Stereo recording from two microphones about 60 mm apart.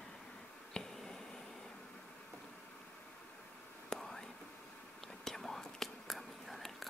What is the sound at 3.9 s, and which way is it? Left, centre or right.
Whispering, centre.